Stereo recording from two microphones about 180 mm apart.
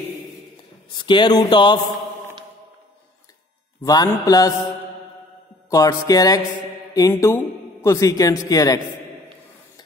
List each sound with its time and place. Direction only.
0.9 s speech: 25° left (ahead or behind)
3.8 s speech: 20° left (ahead or behind)
5.7 s a man's voice: 20° left (ahead or behind)